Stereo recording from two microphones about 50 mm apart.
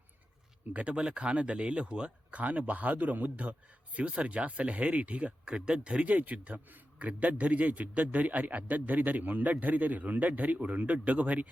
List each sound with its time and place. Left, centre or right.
0.7 s speech: right
0.9 s speech: centre